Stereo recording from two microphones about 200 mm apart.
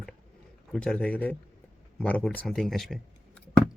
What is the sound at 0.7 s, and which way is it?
Speech, 5° left (ahead or behind).